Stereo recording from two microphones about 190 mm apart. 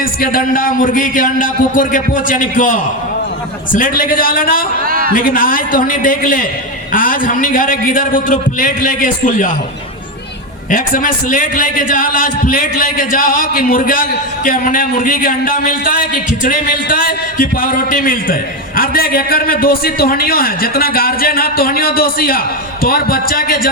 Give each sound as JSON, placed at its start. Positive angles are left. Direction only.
{"t": 0.0, "sound": "a man's voice", "side_deg": 50}
{"t": 4.9, "sound": "a man's voice", "side_deg": -50}
{"t": 5.1, "sound": "a man's voice", "side_deg": 45}
{"t": 10.7, "sound": "a man's voice", "side_deg": 45}